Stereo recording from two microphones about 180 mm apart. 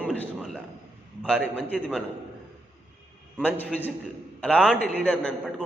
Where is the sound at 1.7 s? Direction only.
5° left (ahead or behind).